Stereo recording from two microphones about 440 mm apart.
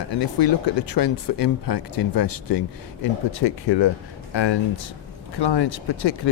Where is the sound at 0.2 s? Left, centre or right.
Left.